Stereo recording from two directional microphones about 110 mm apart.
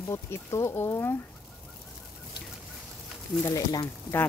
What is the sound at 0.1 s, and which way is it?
Speech, 25° left (ahead or behind).